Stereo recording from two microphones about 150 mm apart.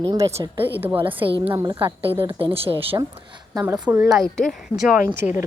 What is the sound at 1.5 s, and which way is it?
Speech, 25° right (ahead or behind).